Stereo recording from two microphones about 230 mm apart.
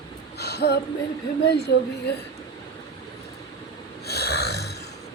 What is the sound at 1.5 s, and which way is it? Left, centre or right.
Speech, left.